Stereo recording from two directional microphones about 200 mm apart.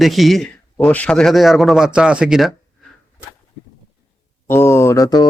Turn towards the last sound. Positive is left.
turn(degrees=20)  # may be behind; listen again after turning